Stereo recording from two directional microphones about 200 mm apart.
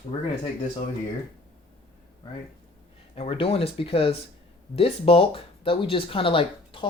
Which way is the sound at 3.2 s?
30° left (ahead or behind).